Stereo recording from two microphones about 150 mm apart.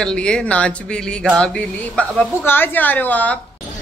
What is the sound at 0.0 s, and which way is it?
Speech, 5° left (ahead or behind).